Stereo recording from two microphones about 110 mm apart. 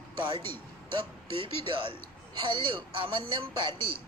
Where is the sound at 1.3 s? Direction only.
55° right (ahead or behind).